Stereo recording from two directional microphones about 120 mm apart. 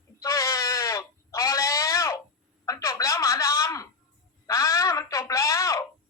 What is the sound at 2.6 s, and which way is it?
Telephone, 30° left (ahead or behind).